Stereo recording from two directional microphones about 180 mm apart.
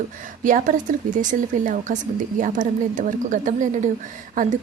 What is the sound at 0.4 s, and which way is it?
Speech, 45° right (ahead or behind).